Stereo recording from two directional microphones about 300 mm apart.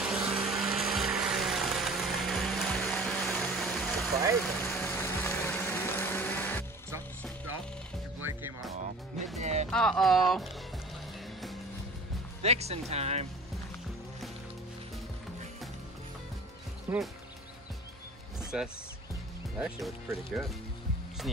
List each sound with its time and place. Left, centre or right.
0.0 s music: centre
4.4 s a sound: centre
8.2 s music: centre
9.4 s music: right
9.7 s speech: centre
12.4 s speech: right
16.9 s speech: centre
18.5 s speech: centre